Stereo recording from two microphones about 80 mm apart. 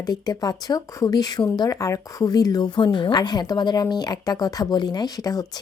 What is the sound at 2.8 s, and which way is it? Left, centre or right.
A woman's voice, left.